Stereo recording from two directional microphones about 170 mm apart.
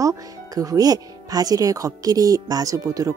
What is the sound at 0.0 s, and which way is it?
Speech, 20° right (ahead or behind).